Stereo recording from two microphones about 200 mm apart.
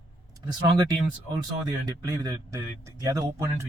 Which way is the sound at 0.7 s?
20° right (ahead or behind).